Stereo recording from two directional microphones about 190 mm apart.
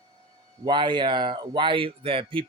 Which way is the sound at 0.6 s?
25° right (ahead or behind).